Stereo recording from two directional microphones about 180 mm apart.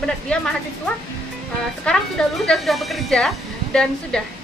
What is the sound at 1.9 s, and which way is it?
Speech, 5° left (ahead or behind).